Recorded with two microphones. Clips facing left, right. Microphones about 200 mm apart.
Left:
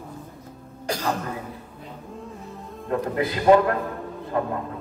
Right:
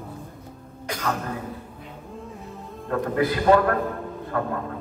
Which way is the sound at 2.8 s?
25° left (ahead or behind).